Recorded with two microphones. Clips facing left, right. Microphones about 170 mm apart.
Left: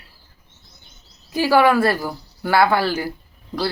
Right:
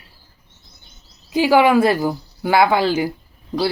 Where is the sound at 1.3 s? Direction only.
15° right (ahead or behind).